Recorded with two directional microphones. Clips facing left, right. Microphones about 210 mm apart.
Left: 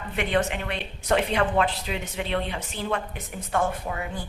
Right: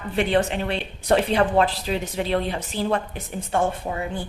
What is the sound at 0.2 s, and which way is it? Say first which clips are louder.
A woman's voice: right 4 dB; 30° right (ahead or behind).